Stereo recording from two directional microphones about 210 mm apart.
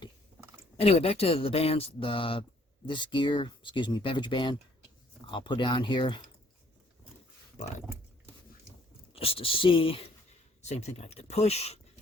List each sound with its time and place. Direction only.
0.8 s speech: 30° left (ahead or behind)
9.1 s speech: 25° left (ahead or behind)